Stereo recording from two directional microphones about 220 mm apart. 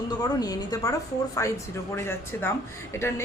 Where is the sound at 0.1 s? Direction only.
20° left (ahead or behind).